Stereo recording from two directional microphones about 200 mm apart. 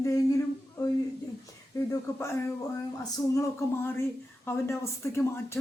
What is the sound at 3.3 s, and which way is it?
A woman's voice, 15° left (ahead or behind).